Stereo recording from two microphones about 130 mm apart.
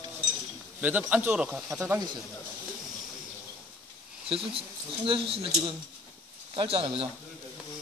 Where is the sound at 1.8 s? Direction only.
25° right (ahead or behind).